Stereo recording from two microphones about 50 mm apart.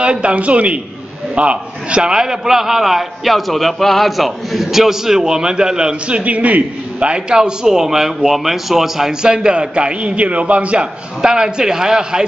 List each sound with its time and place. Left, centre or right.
0.0 s a man's voice: right
11.1 s a man's voice: centre